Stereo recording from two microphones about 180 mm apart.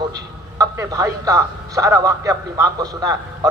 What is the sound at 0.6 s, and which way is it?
A man's voice, 20° right (ahead or behind).